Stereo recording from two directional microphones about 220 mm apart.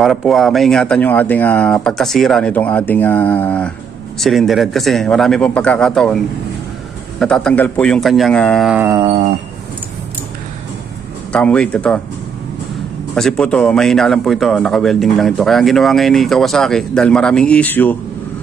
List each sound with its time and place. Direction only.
0.0 s speech: centre (ahead or behind)
8.8 s a sound: 15° right (ahead or behind)
11.3 s speech: 5° left (ahead or behind)
13.1 s speech: 5° left (ahead or behind)